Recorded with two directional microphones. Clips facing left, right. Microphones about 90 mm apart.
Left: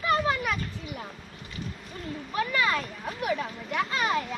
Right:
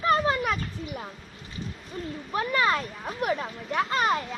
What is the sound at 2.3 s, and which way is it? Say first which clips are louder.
Speech: right 2 dB; 35° right (ahead or behind).